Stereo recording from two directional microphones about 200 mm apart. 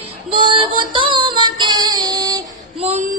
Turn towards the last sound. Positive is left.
turn(degrees=-35)  # may be behind; listen again after turning